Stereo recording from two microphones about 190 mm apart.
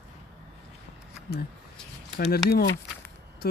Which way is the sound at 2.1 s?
55° left (ahead or behind).